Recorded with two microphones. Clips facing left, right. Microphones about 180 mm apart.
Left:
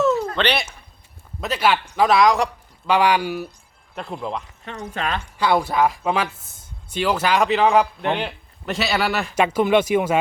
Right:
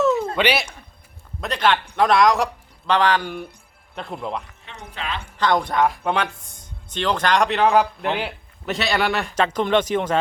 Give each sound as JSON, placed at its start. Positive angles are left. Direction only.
{"t": 0.0, "sound": "a sound", "side_deg": 0}
{"t": 0.3, "sound": "speech", "side_deg": -10}
{"t": 1.4, "sound": "speech", "side_deg": 5}
{"t": 4.9, "sound": "a woman's voice", "side_deg": 45}
{"t": 5.4, "sound": "speech", "side_deg": 10}